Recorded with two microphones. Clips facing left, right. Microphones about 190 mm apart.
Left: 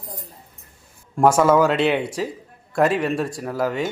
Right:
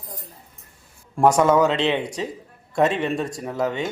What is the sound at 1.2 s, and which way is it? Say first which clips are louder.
Speech: left 1 dB; 5° left (ahead or behind).